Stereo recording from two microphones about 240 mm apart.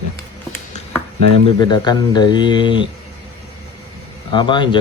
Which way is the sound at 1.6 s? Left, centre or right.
Centre.